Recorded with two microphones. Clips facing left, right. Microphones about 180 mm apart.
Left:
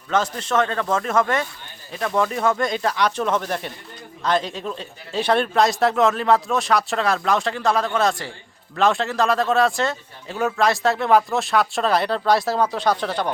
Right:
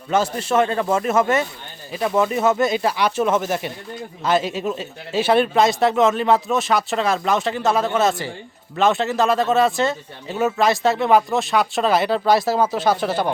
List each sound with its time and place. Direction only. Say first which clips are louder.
0.1 s a man's voice: right 2 dB; 10° right (ahead or behind)